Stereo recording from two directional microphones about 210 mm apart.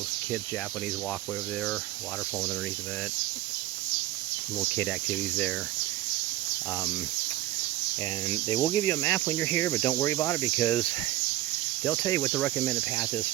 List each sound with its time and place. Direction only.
4.6 s speech: 5° left (ahead or behind)
8.3 s speech: 20° left (ahead or behind)
11.9 s speech: 15° left (ahead or behind)